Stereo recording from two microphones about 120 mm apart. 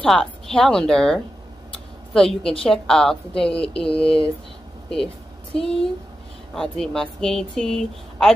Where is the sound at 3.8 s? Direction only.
50° left (ahead or behind).